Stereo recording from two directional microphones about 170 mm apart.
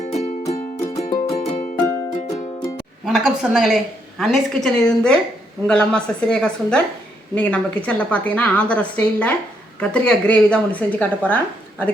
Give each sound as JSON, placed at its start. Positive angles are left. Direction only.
{"t": 0.0, "sound": "music", "side_deg": 40}
{"t": 1.8, "sound": "music", "side_deg": 15}
{"t": 3.1, "sound": "a woman's voice", "side_deg": 0}